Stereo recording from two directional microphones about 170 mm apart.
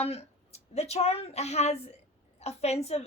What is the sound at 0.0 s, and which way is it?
A woman's voice, 40° left (ahead or behind).